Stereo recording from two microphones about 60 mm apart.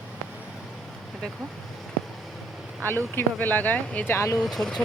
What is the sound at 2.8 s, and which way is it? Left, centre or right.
Speech, left.